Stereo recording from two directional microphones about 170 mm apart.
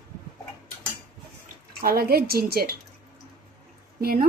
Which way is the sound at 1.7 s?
65° right (ahead or behind).